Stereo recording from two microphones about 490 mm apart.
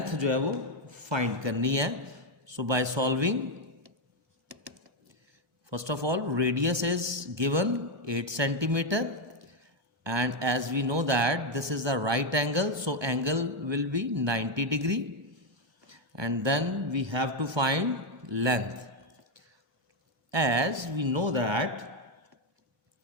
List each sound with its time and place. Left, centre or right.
0.0 s a sound: right
0.9 s a man's voice: right
5.6 s speech: right
16.1 s speech: right
20.3 s speech: right